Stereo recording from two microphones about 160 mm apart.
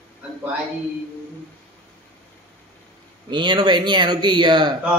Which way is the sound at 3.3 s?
30° right (ahead or behind).